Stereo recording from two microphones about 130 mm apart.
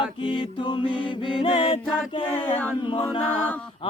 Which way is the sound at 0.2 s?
40° left (ahead or behind).